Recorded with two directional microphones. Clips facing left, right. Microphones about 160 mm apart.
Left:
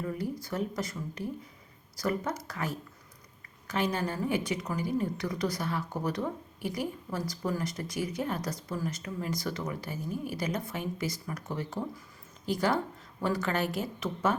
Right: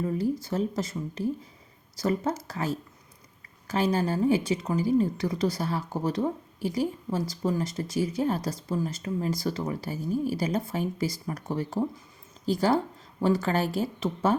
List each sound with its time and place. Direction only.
0.4 s a woman's voice: 25° right (ahead or behind)